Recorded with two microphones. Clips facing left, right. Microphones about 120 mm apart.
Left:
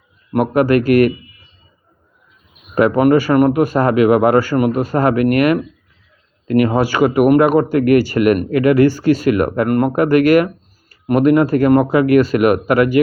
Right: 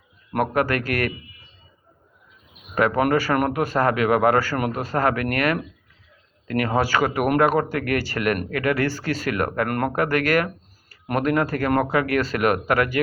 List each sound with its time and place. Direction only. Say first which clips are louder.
0.3 s speech: left 8 dB; 15° left (ahead or behind)
2.7 s speech: left 8 dB; 15° left (ahead or behind)